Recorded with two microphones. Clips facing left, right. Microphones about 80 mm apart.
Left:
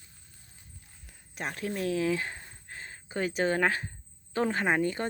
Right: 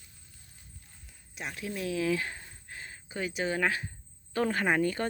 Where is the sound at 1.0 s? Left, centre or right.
Left.